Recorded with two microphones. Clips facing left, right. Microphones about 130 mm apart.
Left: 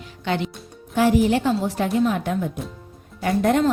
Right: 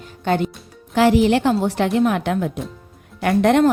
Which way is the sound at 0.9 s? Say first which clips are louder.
Right 3 dB; 80° right.